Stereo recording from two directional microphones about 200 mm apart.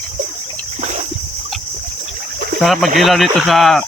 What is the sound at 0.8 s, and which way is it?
Boat, 35° right (ahead or behind).